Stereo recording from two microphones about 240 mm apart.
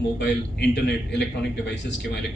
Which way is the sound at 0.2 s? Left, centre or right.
Left.